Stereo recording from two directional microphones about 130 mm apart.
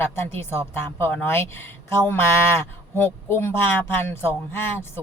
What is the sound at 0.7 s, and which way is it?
A woman's voice, 15° left (ahead or behind).